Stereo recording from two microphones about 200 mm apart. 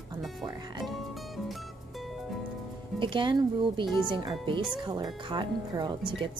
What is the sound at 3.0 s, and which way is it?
Speech, 25° right (ahead or behind).